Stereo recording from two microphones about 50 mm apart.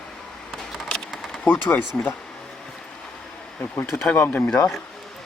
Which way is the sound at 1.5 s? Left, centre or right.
Left.